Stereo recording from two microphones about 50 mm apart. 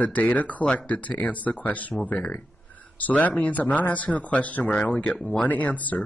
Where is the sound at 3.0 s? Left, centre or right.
Left.